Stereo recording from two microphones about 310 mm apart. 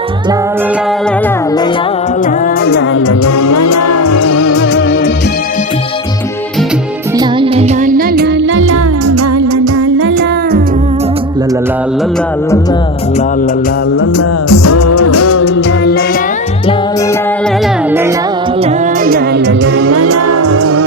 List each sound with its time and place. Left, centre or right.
2.6 s music: left
3.1 s music: left
7.2 s music: centre; by 10.6 s right
14.0 s music: left
18.6 s music: right